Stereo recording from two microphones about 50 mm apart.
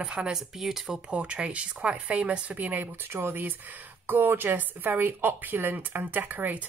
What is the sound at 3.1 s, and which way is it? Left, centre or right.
Speech, right.